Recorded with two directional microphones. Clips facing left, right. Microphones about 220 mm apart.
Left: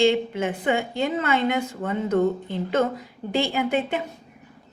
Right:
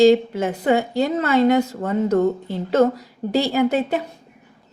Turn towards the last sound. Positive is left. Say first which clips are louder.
# right 5 dB
turn(degrees=-40)  # may be behind; listen again after turning